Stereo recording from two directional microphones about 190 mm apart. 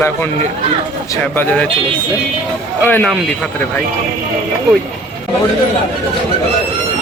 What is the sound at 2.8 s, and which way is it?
Speech, 10° left (ahead or behind).